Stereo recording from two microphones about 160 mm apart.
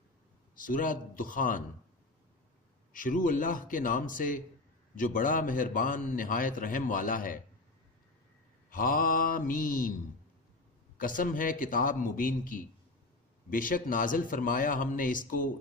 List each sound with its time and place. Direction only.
0.6 s a man's voice: 60° left (ahead or behind)
2.9 s a man's voice: 55° left (ahead or behind)
8.6 s a man's voice: 60° left (ahead or behind)
11.0 s a man's voice: 60° left (ahead or behind)